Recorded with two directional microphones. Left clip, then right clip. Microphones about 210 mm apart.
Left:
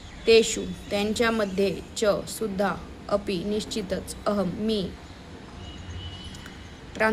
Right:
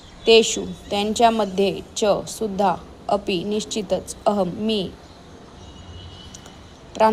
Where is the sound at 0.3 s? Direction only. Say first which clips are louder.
Right 4 dB; 20° right (ahead or behind).